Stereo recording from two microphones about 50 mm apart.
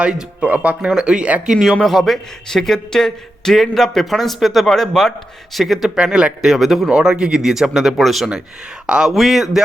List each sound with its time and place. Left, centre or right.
0.0 s speech: right
0.9 s speech: centre
1.8 s speech: centre
6.0 s speech: centre
6.4 s speech: centre
6.9 s speech: centre